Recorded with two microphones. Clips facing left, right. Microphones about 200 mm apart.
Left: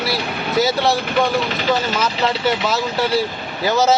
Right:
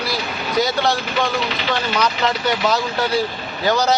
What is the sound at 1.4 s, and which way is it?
Speech, 45° left (ahead or behind).